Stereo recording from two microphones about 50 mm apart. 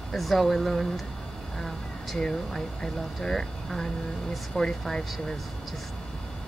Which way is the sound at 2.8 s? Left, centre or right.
Centre.